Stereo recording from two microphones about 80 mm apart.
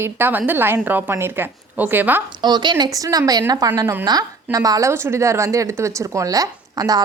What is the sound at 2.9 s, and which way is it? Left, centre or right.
A woman's voice, right.